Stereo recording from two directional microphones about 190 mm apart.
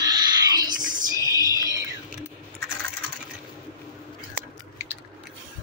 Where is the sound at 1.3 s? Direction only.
20° left (ahead or behind).